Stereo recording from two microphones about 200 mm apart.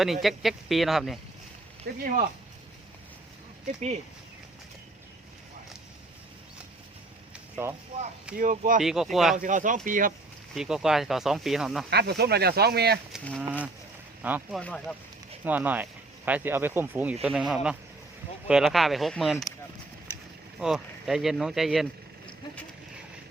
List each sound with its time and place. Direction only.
0.0 s speech: centre (ahead or behind)
1.9 s speech: 50° right (ahead or behind)
7.5 s speech: 10° right (ahead or behind)
8.4 s speech: 45° right (ahead or behind)
8.8 s speech: centre (ahead or behind)
9.3 s speech: 40° right (ahead or behind)
10.5 s speech: centre (ahead or behind)
11.9 s speech: 55° right (ahead or behind)
13.1 s speech: centre (ahead or behind)
14.2 s speech: 10° right (ahead or behind)
14.6 s speech: 5° left (ahead or behind)
15.4 s speech: 10° right (ahead or behind)
20.6 s speech: 5° right (ahead or behind)